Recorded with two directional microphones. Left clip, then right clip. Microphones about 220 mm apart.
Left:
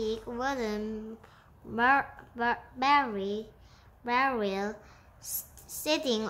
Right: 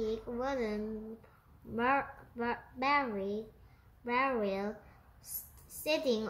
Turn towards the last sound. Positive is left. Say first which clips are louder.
# left 3 dB
turn(degrees=25)  # may be behind; listen again after turning